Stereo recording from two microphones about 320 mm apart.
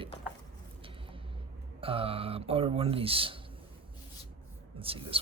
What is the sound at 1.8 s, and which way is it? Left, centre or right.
Speech, centre.